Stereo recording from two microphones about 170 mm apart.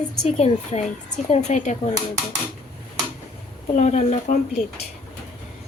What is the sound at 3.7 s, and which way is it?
Speech, 45° left (ahead or behind).